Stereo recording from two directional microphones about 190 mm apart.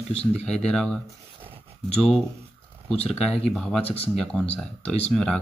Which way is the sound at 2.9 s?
30° left (ahead or behind).